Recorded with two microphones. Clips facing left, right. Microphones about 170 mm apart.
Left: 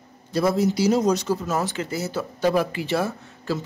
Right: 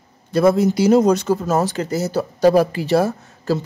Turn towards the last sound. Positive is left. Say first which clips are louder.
# right 6 dB
turn(degrees=-40)  # may be behind; listen again after turning